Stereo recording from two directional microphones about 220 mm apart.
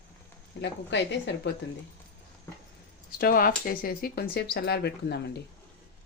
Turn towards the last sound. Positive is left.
turn(degrees=50)  # may be behind; listen again after turning